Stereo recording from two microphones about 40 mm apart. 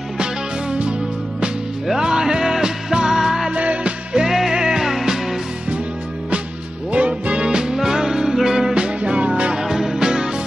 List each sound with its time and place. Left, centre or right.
2.0 s music: centre
3.5 s music: right
4.5 s music: centre
6.9 s music: right; by 8.7 s centre
8.7 s music: right
9.6 s music: centre